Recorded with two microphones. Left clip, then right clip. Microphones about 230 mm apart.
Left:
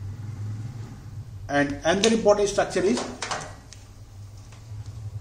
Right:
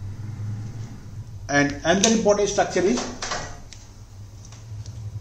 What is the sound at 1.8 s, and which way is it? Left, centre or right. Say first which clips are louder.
Speech: right 1 dB; centre.